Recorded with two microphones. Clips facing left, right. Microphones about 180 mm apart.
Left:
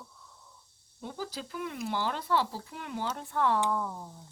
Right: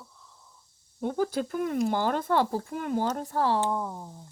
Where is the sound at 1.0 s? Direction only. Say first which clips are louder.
Right 11 dB; 55° right (ahead or behind); by 3.6 s 35° right (ahead or behind).